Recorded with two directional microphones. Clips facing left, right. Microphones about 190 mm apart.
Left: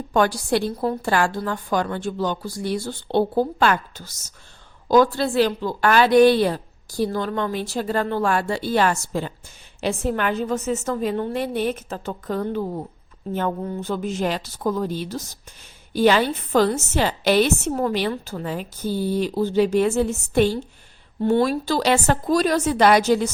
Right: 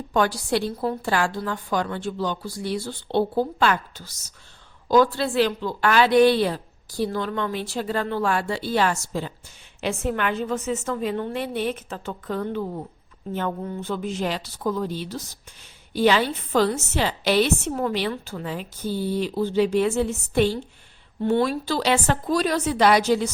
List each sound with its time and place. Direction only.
0.1 s a woman's voice: 50° left (ahead or behind)
9.8 s a woman's voice: 35° left (ahead or behind)